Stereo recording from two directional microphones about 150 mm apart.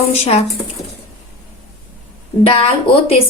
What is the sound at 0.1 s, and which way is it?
Speech, 45° left (ahead or behind).